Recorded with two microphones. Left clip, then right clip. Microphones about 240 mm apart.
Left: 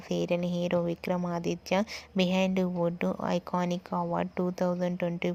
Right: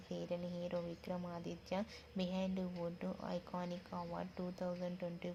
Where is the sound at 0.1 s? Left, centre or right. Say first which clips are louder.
Left 14 dB; left.